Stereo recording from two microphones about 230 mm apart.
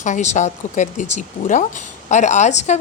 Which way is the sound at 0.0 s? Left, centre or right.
Left.